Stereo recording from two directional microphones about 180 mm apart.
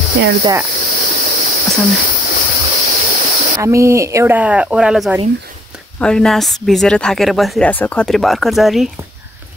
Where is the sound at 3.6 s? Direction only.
15° right (ahead or behind); by 8.8 s centre (ahead or behind).